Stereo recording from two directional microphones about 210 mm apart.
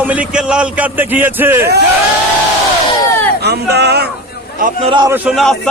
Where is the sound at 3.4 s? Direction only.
50° right (ahead or behind).